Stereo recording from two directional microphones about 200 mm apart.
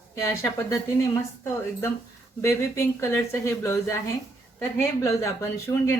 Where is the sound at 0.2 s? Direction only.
15° left (ahead or behind).